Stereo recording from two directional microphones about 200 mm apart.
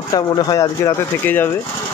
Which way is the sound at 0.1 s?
20° left (ahead or behind).